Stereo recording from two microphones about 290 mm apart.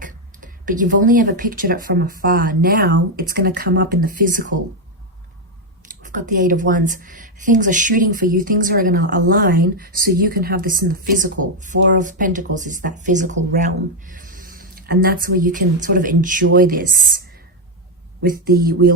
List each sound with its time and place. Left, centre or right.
0.0 s a woman's voice: right
5.9 s a woman's voice: right
18.2 s speech: right